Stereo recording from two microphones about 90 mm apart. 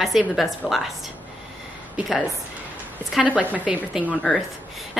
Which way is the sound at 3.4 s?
15° right (ahead or behind).